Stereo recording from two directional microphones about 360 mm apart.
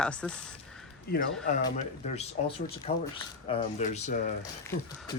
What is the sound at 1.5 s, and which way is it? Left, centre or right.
Speech, centre.